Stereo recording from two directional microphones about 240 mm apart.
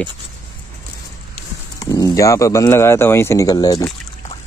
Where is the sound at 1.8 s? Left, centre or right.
Centre.